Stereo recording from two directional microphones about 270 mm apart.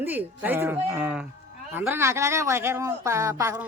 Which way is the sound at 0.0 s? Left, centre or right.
Centre.